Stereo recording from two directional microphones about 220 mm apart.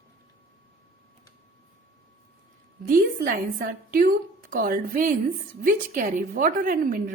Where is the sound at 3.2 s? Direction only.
40° right (ahead or behind).